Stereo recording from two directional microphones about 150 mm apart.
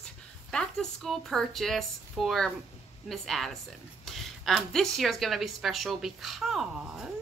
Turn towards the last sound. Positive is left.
turn(degrees=-5)  # may be behind; listen again after turning